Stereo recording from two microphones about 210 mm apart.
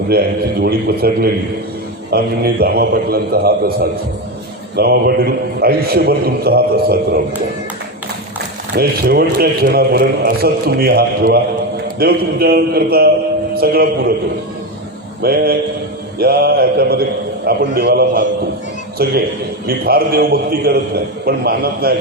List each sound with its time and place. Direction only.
0.6 s a man's voice: 45° right (ahead or behind)
8.7 s a man's voice: 50° right (ahead or behind)
15.2 s a man's voice: 50° right (ahead or behind)
19.6 s a man's voice: 45° right (ahead or behind)